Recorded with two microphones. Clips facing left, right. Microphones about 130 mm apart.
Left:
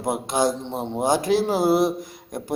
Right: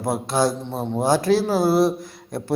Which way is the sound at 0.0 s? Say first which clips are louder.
Right 1 dB; 20° left (ahead or behind).